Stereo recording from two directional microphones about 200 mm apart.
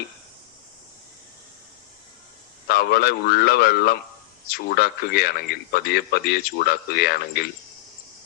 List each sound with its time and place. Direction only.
2.6 s speech: 50° left (ahead or behind)